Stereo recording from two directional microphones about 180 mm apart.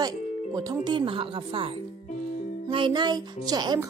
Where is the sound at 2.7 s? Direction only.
30° right (ahead or behind).